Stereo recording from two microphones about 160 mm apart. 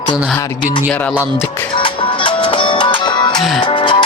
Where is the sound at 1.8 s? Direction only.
30° left (ahead or behind).